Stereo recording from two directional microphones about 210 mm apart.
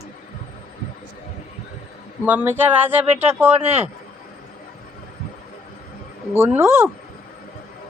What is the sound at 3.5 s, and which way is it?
Speech, 30° right (ahead or behind).